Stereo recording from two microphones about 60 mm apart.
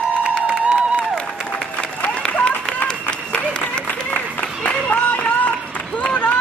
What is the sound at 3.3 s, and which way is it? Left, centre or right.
Applause, centre.